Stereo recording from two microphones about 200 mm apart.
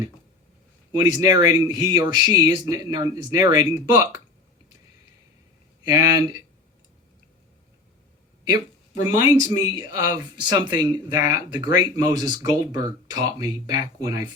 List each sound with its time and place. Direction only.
0.9 s speech: 20° right (ahead or behind)
5.8 s speech: 15° right (ahead or behind)
8.4 s speech: 15° right (ahead or behind)